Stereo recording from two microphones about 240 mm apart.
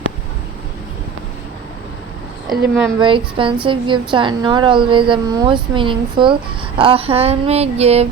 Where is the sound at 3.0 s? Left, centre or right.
Right.